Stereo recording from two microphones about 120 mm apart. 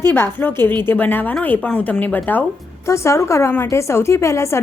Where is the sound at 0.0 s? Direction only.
20° left (ahead or behind).